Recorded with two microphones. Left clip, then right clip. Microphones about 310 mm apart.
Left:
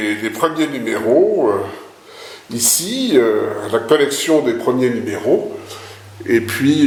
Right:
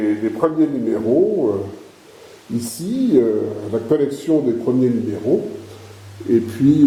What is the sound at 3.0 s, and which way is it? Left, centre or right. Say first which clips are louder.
Speech: left 2 dB; left.